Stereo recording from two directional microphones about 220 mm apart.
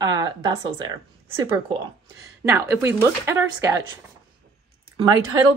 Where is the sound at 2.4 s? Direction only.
10° right (ahead or behind).